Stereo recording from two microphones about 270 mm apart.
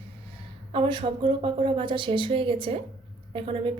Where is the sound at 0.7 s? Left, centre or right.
Centre.